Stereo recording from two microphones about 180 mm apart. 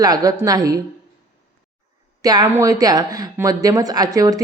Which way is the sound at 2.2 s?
20° right (ahead or behind).